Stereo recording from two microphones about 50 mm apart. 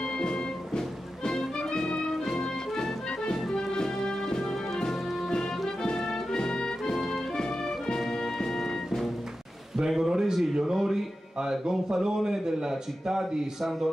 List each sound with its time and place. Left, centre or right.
0.2 s music: centre
9.8 s a sound: centre
11.4 s a man's voice: centre